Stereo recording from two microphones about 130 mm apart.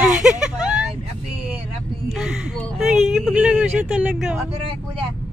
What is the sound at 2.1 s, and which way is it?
Speech, 5° right (ahead or behind).